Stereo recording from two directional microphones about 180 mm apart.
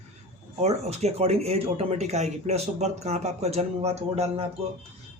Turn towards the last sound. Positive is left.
turn(degrees=-35)  # may be behind; listen again after turning